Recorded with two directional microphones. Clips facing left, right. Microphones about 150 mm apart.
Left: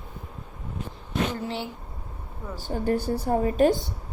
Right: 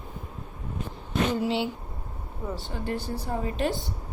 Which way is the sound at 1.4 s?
15° right (ahead or behind).